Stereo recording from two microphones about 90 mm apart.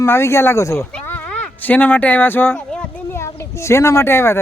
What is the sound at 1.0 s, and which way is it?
Speech, 20° left (ahead or behind).